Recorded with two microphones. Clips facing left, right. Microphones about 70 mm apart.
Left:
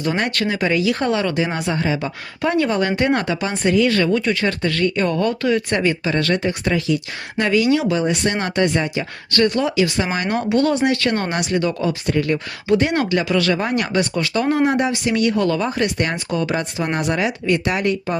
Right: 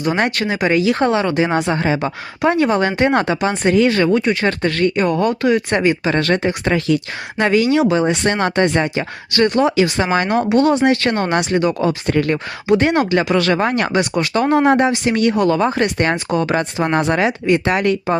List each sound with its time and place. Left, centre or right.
0.3 s speech: right
1.8 s speech: right
2.4 s speech: right
4.9 s speech: right
6.1 s speech: right
6.7 s speech: right
7.3 s speech: right
12.0 s speech: right
12.9 s speech: right
13.6 s speech: right
13.9 s speech: right
16.1 s speech: right